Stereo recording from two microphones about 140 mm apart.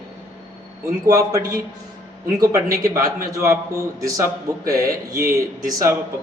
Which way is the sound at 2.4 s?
25° right (ahead or behind).